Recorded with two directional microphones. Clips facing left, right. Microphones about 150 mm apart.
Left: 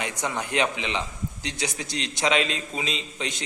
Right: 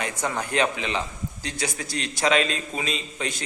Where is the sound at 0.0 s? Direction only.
20° left (ahead or behind).